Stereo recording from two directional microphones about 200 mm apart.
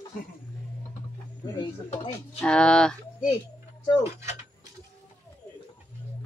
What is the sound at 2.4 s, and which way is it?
Speech, 5° left (ahead or behind).